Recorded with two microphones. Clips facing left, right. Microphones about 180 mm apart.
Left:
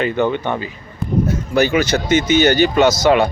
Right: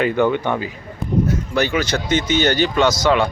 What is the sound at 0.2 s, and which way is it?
Speech, 10° right (ahead or behind).